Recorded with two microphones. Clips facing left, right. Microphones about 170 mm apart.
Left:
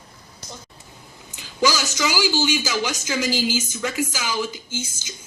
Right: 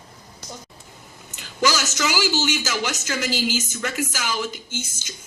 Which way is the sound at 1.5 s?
10° left (ahead or behind).